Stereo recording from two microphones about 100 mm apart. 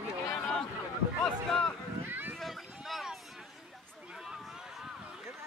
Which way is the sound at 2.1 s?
20° right (ahead or behind).